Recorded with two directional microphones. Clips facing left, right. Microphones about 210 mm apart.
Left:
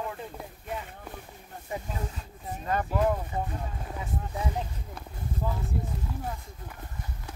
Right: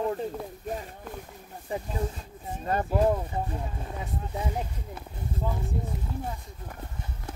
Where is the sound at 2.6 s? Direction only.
35° right (ahead or behind).